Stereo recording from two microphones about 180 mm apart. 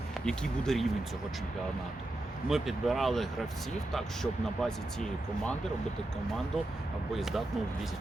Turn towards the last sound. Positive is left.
turn(degrees=0)  # may be behind; listen again after turning